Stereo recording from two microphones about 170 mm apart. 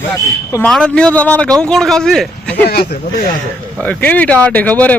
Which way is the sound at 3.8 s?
10° left (ahead or behind).